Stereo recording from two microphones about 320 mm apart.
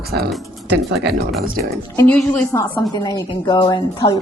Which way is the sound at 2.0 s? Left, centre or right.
Centre.